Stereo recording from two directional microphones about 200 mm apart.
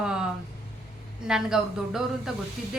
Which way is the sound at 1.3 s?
5° right (ahead or behind).